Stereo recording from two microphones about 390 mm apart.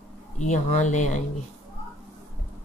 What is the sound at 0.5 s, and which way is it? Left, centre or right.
Speech, centre.